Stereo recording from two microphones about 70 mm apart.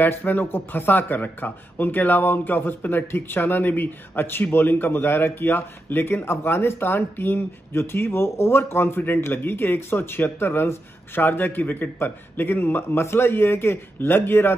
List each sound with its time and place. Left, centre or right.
0.0 s speech: left